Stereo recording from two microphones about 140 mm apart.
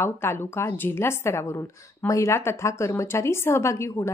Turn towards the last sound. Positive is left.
turn(degrees=20)  # may be behind; listen again after turning